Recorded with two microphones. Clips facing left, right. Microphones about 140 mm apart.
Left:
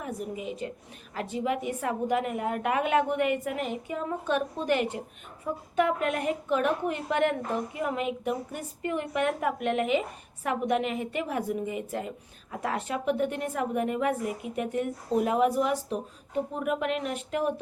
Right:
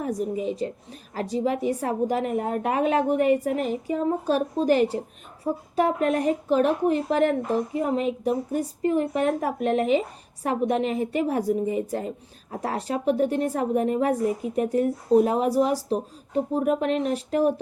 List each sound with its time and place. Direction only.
0.0 s a woman's voice: 35° right (ahead or behind)